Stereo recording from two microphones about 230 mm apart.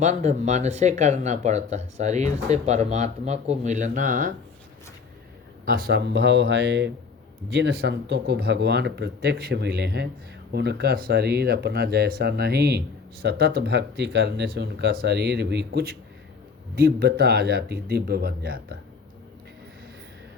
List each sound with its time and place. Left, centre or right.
0.0 s speech: right
5.6 s speech: right